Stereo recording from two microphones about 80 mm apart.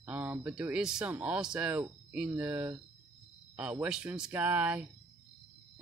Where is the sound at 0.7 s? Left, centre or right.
Centre.